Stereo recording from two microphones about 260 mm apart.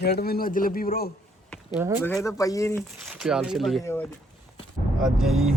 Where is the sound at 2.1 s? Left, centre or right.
Centre.